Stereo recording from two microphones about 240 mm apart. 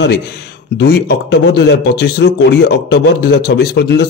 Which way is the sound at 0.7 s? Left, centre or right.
Left.